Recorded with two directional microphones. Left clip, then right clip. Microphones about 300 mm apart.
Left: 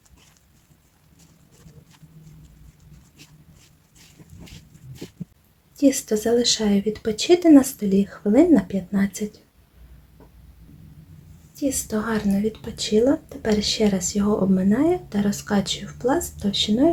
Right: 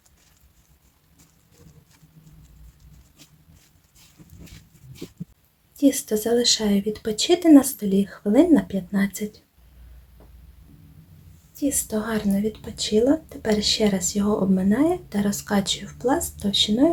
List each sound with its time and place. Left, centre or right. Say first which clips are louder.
5.7 s speech: left 1 dB; centre
11.5 s speech: even; centre